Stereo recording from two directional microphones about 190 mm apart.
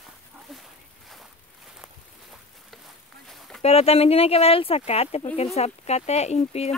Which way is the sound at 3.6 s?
30° left (ahead or behind).